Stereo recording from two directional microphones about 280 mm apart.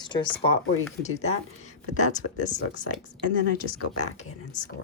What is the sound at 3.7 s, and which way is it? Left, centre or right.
Speech, left.